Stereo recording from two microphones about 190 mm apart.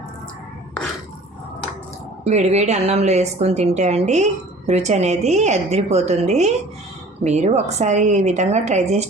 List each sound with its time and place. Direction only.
2.2 s a woman's voice: 35° right (ahead or behind)